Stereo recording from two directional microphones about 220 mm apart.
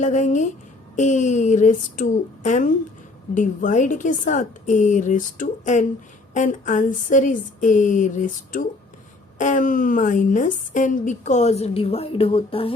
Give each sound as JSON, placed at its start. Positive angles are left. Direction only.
{"t": 0.0, "sound": "a woman's voice", "side_deg": 35}